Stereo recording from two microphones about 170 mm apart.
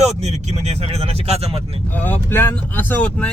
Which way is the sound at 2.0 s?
10° left (ahead or behind).